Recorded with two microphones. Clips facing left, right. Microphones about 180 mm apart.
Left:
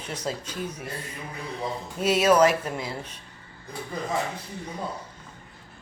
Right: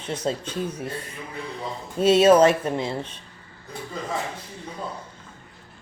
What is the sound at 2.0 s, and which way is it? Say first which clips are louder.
Speech: right 4 dB; 30° right (ahead or behind).